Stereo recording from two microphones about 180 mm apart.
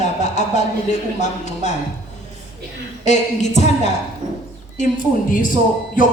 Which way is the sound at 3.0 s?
40° left (ahead or behind).